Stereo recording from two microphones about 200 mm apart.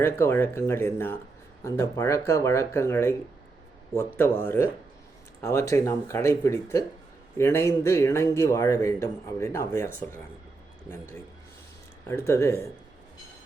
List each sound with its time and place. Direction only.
0.0 s speech: 10° left (ahead or behind)
12.0 s speech: 15° left (ahead or behind)